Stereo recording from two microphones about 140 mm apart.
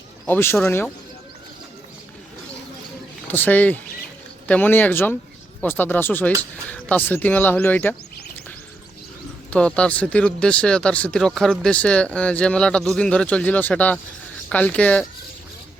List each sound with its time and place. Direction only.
0.3 s speech: 15° left (ahead or behind)
3.2 s speech: 15° left (ahead or behind)
9.5 s speech: 10° left (ahead or behind)